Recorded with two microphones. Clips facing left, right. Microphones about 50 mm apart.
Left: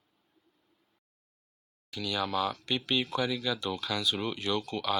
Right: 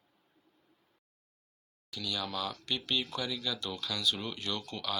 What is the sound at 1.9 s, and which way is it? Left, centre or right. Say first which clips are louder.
Speech: left 5 dB; left.